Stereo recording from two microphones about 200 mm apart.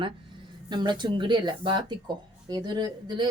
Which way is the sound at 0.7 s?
20° right (ahead or behind).